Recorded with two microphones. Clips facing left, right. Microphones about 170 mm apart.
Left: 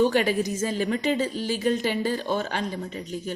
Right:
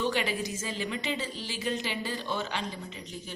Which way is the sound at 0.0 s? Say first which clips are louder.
Left 8 dB; 45° left (ahead or behind).